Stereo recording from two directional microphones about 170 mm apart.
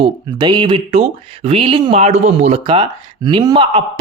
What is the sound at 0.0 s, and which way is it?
A man's voice, 25° right (ahead or behind).